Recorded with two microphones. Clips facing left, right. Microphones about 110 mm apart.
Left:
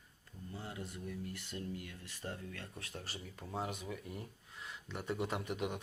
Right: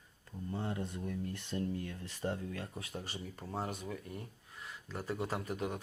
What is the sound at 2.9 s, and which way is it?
Speech, centre (ahead or behind).